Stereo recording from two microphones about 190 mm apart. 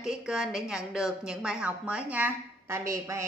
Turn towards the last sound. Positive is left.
turn(degrees=-15)  # may be behind; listen again after turning